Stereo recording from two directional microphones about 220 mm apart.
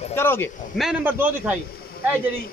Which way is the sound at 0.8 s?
5° right (ahead or behind).